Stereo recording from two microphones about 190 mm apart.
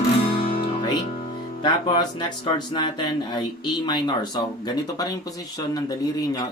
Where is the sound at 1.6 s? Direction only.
25° left (ahead or behind).